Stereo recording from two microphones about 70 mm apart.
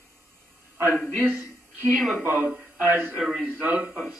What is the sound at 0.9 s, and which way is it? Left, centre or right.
Speech, left.